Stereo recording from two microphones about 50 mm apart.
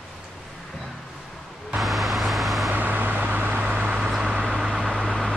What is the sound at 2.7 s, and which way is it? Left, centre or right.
Vehicle, right.